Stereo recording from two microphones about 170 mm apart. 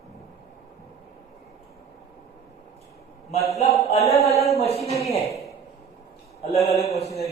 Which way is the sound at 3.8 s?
40° left (ahead or behind).